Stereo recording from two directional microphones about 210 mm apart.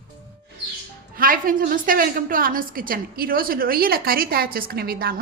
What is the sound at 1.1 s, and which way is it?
A woman's voice, 40° right (ahead or behind).